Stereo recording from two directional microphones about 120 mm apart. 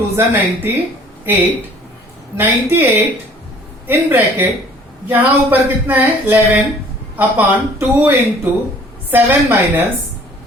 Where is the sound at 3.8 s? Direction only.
15° right (ahead or behind).